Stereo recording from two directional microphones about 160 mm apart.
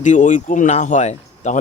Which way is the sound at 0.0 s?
50° left (ahead or behind).